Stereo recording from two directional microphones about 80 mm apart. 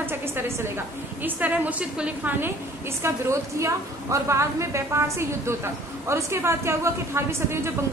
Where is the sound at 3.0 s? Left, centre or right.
Right.